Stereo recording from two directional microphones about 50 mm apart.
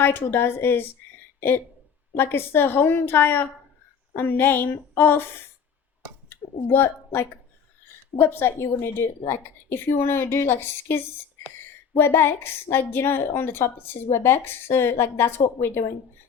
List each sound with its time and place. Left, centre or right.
0.0 s a woman's voice: left
6.2 s a woman's voice: left